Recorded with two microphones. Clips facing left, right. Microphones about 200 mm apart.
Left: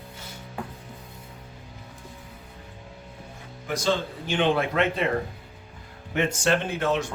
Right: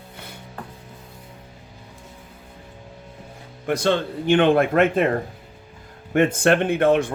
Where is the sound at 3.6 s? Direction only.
60° right (ahead or behind).